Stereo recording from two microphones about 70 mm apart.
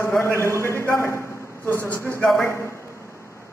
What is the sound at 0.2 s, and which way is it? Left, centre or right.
A man's voice, left.